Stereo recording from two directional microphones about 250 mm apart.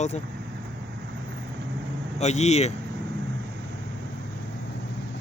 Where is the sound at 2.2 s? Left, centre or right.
Left.